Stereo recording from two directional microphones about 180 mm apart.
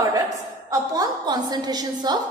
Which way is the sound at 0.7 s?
20° right (ahead or behind).